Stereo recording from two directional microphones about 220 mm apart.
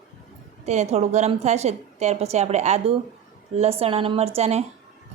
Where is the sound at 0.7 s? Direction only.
30° right (ahead or behind).